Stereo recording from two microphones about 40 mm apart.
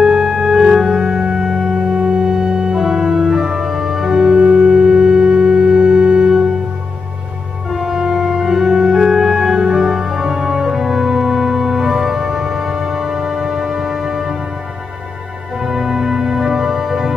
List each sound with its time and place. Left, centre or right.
0.0 s music: centre
2.8 s organ: centre
7.7 s music: centre
15.6 s music: centre